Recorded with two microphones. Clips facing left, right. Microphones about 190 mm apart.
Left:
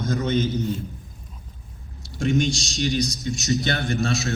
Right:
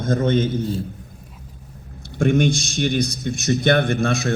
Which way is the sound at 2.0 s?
55° right (ahead or behind).